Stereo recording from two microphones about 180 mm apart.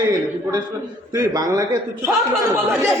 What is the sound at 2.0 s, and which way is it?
Speech, 15° right (ahead or behind).